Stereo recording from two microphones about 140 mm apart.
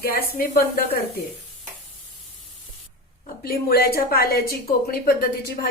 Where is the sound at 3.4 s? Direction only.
90° left.